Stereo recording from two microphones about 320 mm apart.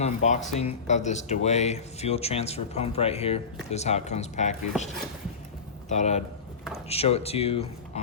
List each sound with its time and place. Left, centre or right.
0.0 s speech: left
5.9 s speech: left